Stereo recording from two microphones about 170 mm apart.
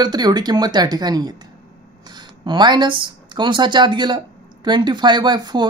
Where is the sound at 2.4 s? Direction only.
25° right (ahead or behind).